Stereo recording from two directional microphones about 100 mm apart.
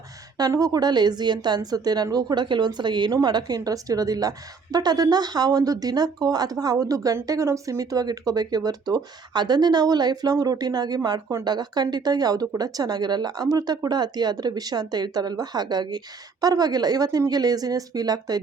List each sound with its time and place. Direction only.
0.3 s a woman's voice: 40° right (ahead or behind)